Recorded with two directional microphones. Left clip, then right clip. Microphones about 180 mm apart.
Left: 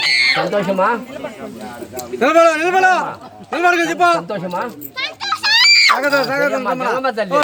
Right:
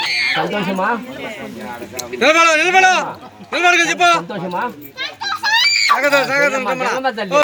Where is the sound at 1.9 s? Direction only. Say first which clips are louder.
Even; 60° left (ahead or behind).